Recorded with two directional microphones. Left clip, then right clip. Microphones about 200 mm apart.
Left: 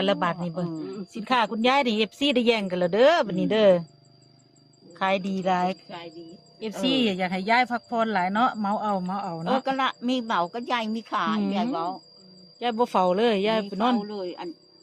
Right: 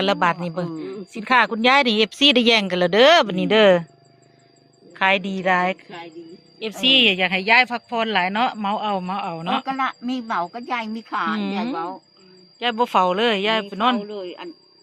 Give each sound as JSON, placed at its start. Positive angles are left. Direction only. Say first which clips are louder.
{"t": 0.0, "sound": "a woman's voice", "louder": "right 5 dB", "side_deg": -25}
{"t": 4.9, "sound": "speech", "louder": "right 6 dB", "side_deg": -10}
{"t": 5.4, "sound": "a woman's voice", "louder": "right 3 dB", "side_deg": -25}
{"t": 6.8, "sound": "a woman's voice", "louder": "right 9 dB", "side_deg": -20}
{"t": 9.6, "sound": "a woman's voice", "louder": "right 1 dB", "side_deg": 60}
{"t": 12.5, "sound": "a man's voice", "louder": "right 5 dB", "side_deg": -5}
{"t": 14.0, "sound": "a woman's voice", "louder": "right 2 dB", "side_deg": 55}